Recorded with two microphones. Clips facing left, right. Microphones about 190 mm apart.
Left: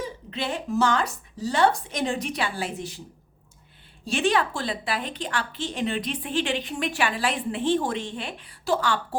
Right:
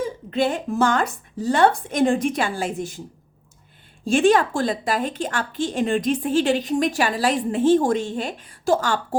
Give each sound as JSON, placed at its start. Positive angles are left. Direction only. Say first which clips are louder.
{"t": 0.0, "sound": "a woman's voice", "louder": "right 9 dB", "side_deg": -45}
{"t": 4.0, "sound": "a woman's voice", "louder": "right 7 dB", "side_deg": -45}